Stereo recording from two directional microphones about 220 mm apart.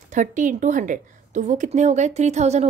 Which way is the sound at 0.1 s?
35° right (ahead or behind).